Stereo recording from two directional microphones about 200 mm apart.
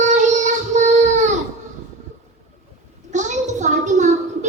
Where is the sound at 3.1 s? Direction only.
35° right (ahead or behind).